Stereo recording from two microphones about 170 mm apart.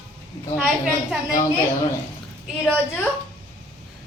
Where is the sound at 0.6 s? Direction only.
5° right (ahead or behind).